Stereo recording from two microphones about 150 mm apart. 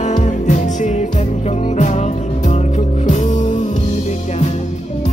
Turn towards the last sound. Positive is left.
turn(degrees=50)  # may be behind; listen again after turning